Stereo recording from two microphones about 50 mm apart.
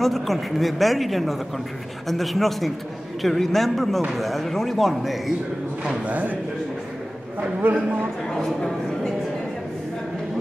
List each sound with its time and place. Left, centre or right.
0.0 s speech: centre
6.0 s speech: right
7.6 s speech: right
8.4 s speech: centre